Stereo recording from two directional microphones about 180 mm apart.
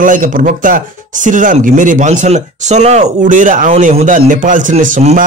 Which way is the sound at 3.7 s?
35° right (ahead or behind).